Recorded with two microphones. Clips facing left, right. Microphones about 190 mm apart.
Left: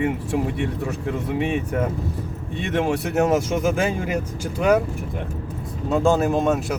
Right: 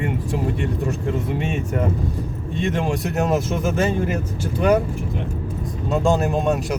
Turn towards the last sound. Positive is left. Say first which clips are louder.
# left 1 dB
turn(degrees=0)  # may be behind; listen again after turning